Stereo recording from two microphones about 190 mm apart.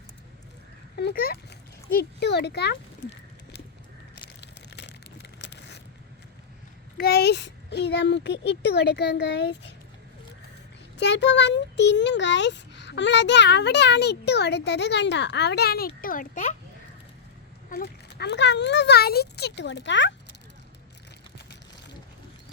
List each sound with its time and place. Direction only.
0.9 s a sound: 55° left (ahead or behind)
2.0 s speech: 60° left (ahead or behind)
4.1 s a sound: 65° left (ahead or behind)
6.9 s a child's voice: 55° left (ahead or behind)
10.9 s a child's voice: 65° left (ahead or behind); by 16.6 s 40° left (ahead or behind)
17.7 s a child's voice: 55° left (ahead or behind)